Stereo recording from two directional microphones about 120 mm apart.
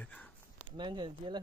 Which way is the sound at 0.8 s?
40° right (ahead or behind).